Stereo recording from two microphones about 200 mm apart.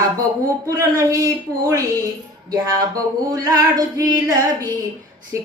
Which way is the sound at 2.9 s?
15° right (ahead or behind).